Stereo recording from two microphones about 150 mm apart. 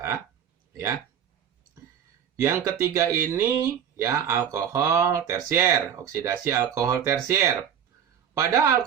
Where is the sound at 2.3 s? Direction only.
20° right (ahead or behind).